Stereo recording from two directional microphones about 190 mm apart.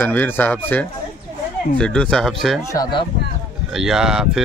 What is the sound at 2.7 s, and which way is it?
Speech, 20° left (ahead or behind).